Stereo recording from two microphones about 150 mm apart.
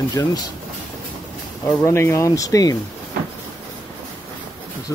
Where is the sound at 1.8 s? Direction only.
15° left (ahead or behind).